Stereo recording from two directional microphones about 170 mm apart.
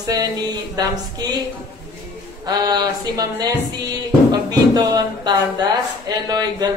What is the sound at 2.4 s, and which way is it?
Speech, 25° right (ahead or behind).